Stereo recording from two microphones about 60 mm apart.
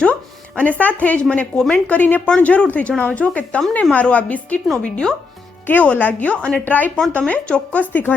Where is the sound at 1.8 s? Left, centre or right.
Left.